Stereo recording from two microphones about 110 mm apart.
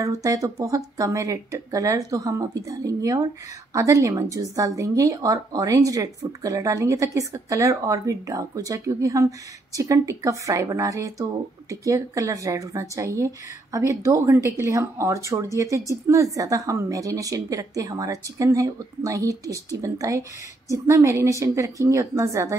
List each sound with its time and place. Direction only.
0.0 s speech: 30° right (ahead or behind)